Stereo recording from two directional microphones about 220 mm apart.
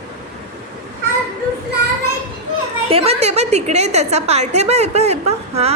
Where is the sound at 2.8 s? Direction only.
25° right (ahead or behind).